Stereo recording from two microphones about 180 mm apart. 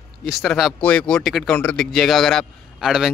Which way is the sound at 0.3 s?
Centre (ahead or behind).